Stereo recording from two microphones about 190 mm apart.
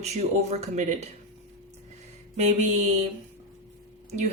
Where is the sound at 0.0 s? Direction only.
35° right (ahead or behind).